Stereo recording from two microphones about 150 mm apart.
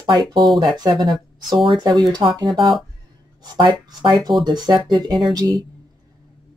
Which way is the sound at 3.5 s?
30° right (ahead or behind).